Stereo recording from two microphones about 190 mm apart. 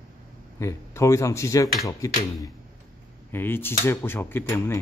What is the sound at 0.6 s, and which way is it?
Speech, 15° left (ahead or behind).